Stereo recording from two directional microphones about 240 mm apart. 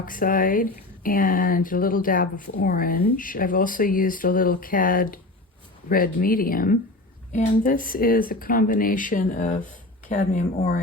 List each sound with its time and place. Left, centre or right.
0.1 s speech: left